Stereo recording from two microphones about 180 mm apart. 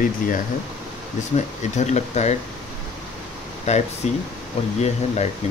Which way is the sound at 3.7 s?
40° left (ahead or behind).